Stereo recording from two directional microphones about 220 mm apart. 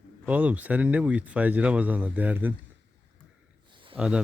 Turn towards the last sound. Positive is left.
turn(degrees=-5)  # may be behind; listen again after turning